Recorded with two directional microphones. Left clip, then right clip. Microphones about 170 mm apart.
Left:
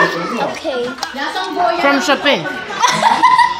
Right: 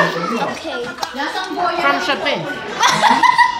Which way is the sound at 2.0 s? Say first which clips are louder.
Left 5 dB; 10° right (ahead or behind).